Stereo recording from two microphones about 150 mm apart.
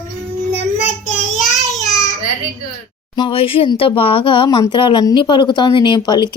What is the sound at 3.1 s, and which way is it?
Speech, 35° left (ahead or behind).